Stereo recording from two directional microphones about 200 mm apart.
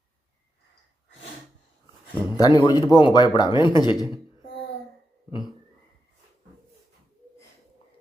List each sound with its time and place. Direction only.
2.3 s a man's voice: 20° left (ahead or behind)